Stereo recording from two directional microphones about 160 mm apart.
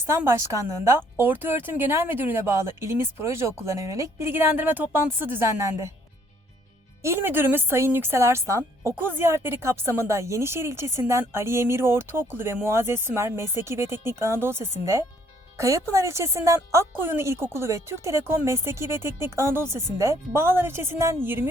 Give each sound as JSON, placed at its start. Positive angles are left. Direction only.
{"t": 0.0, "sound": "speech", "side_deg": -15}
{"t": 7.0, "sound": "speech", "side_deg": -15}